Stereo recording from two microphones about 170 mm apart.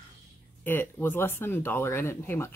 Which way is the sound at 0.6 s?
10° left (ahead or behind).